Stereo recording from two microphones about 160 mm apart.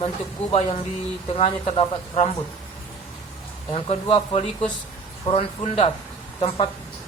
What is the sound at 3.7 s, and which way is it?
Speech, 35° left (ahead or behind).